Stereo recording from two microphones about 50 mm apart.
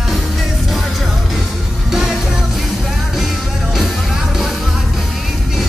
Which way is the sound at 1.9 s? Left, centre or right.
Centre.